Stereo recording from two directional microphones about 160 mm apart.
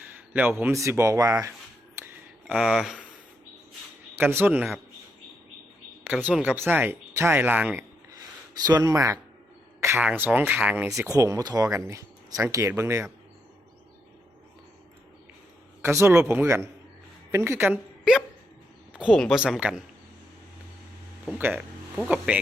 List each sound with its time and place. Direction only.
0.3 s speech: 10° right (ahead or behind)
2.5 s speech: centre (ahead or behind)
4.2 s speech: 15° right (ahead or behind)
6.2 s speech: 5° right (ahead or behind)
8.6 s speech: 25° right (ahead or behind)
10.9 s speech: 20° right (ahead or behind)
15.8 s speech: 15° right (ahead or behind)
18.9 s speech: 5° right (ahead or behind)
21.2 s speech: 10° right (ahead or behind)